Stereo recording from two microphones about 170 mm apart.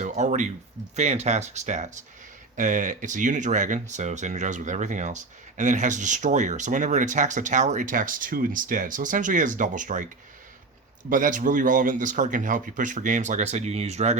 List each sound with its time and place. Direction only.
0.0 s speech: 45° right (ahead or behind)
11.1 s speech: 50° right (ahead or behind)